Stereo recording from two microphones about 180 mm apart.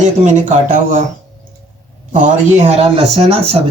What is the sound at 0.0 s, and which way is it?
Speech, 45° right (ahead or behind).